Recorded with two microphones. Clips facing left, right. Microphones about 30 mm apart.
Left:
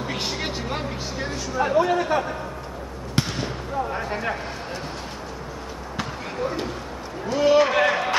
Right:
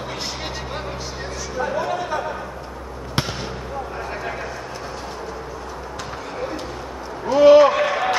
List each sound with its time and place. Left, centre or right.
0.1 s vehicle: left
1.6 s speech: left
3.2 s fireworks: centre
3.9 s speech: centre
7.2 s a man's voice: centre
7.7 s run: centre